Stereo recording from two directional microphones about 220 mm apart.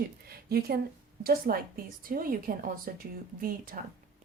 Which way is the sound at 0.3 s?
45° right (ahead or behind).